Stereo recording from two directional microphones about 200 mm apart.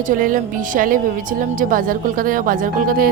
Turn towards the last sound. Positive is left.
turn(degrees=-45)  # may be behind; listen again after turning